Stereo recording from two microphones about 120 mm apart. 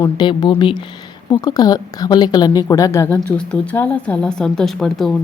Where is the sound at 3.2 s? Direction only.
10° left (ahead or behind).